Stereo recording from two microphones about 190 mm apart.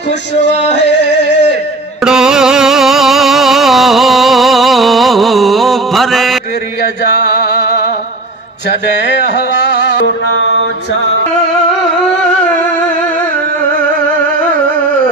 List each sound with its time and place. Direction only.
0.7 s music: 65° left (ahead or behind)
2.0 s music: 5° right (ahead or behind)
7.3 s music: 60° left (ahead or behind)
9.3 s music: 65° left (ahead or behind)